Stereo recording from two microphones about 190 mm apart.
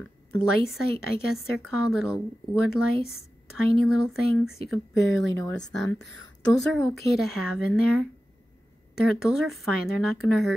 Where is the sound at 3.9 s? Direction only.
Centre (ahead or behind).